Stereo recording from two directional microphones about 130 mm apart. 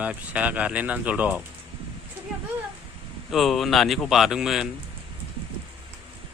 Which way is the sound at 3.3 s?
Centre (ahead or behind).